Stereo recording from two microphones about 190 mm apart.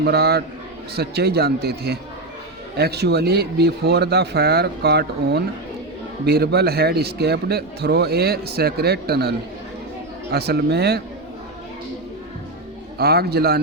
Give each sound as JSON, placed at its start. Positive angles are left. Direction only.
{"t": 0.0, "sound": "a man's voice", "side_deg": -55}
{"t": 10.3, "sound": "a man's voice", "side_deg": -60}
{"t": 13.0, "sound": "a man's voice", "side_deg": -55}